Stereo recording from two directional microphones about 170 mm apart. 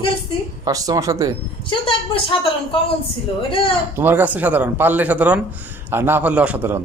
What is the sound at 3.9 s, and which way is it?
Speech, 10° right (ahead or behind).